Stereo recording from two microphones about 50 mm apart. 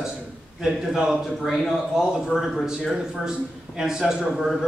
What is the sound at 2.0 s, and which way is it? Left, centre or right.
A man's voice, centre.